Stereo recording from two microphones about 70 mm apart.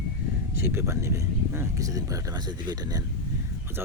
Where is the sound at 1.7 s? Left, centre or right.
Right.